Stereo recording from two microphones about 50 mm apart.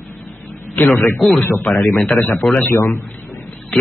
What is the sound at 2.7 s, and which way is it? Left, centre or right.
Speech, left.